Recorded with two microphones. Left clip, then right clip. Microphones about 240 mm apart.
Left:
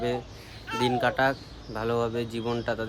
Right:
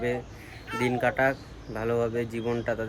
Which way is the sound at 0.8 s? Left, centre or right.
Centre.